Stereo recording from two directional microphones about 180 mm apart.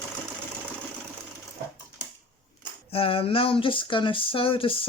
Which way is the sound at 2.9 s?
30° left (ahead or behind).